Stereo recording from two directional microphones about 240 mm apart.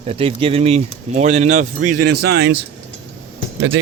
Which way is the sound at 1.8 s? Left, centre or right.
Right.